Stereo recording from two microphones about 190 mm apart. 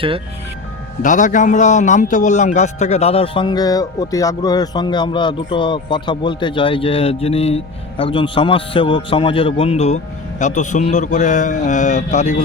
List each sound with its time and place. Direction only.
1.0 s speech: 40° left (ahead or behind)